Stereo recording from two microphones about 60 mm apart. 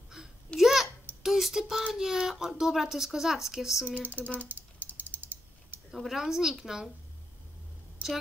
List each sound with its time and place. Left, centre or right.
0.6 s a sound: centre
1.2 s speech: centre
3.8 s speech: right
4.4 s typing: right
5.9 s speech: centre